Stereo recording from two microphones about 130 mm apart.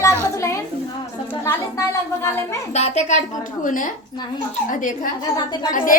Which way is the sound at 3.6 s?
90° left.